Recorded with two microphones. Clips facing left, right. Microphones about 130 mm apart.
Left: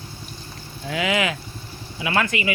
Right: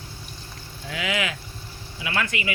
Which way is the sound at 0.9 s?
30° left (ahead or behind).